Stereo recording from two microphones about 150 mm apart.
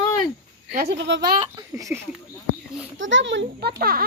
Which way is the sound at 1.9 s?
10° right (ahead or behind).